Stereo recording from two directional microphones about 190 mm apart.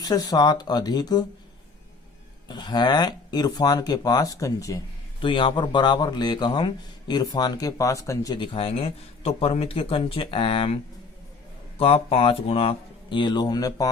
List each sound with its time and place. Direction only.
0.0 s speech: 20° left (ahead or behind)
2.5 s speech: 20° left (ahead or behind)
11.8 s speech: 30° left (ahead or behind)